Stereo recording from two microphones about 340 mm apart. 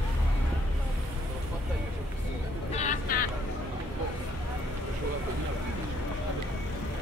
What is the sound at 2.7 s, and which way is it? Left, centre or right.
Vehicle, left.